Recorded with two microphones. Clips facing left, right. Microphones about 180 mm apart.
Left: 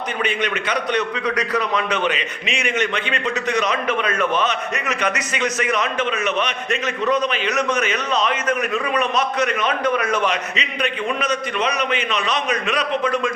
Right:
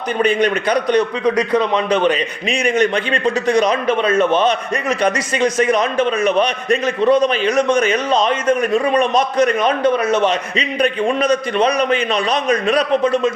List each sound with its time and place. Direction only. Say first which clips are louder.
0.2 s a man's voice: right 9 dB; 35° right (ahead or behind)